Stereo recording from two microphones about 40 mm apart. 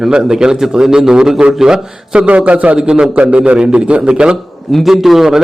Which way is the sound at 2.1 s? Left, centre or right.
Right.